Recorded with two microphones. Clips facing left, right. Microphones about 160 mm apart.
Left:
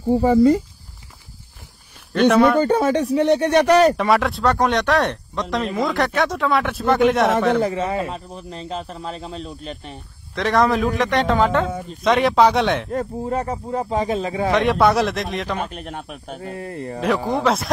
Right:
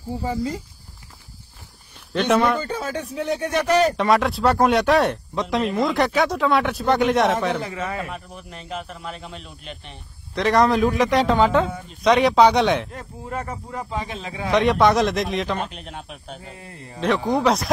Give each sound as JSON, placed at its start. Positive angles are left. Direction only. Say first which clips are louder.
{"t": 0.1, "sound": "speech", "louder": "left 12 dB", "side_deg": 65}
{"t": 2.1, "sound": "speech", "louder": "left 5 dB", "side_deg": 0}
{"t": 2.6, "sound": "speech", "louder": "left 10 dB", "side_deg": 65}
{"t": 3.9, "sound": "speech", "louder": "left 1 dB", "side_deg": 0}
{"t": 7.6, "sound": "a man's voice", "louder": "left 7 dB", "side_deg": 30}
{"t": 10.3, "sound": "speech", "louder": "even", "side_deg": 0}
{"t": 13.2, "sound": "a man's voice", "louder": "left 7 dB", "side_deg": 30}
{"t": 14.5, "sound": "speech", "louder": "even", "side_deg": 0}
{"t": 15.7, "sound": "speech", "louder": "left 5 dB", "side_deg": 50}
{"t": 17.0, "sound": "speech", "louder": "even", "side_deg": 0}